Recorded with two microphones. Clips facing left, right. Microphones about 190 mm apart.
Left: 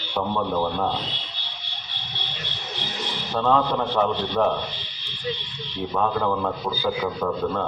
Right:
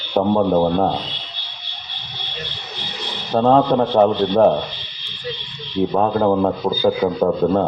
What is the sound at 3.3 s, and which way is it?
A man's voice, 40° right (ahead or behind).